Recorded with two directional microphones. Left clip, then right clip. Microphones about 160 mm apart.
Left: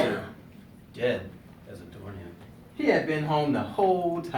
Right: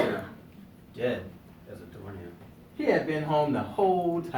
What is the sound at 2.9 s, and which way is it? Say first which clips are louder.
Speech: left 1 dB; 5° left (ahead or behind).